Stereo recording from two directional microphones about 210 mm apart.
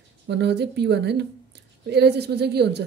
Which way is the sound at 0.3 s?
55° right (ahead or behind).